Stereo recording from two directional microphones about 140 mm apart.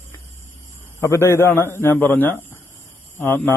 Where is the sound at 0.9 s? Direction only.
20° left (ahead or behind).